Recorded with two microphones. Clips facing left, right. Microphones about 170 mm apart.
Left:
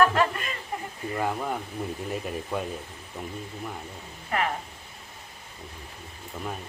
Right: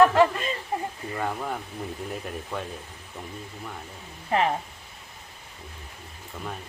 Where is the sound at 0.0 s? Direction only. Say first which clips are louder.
Right 4 dB; 20° right (ahead or behind).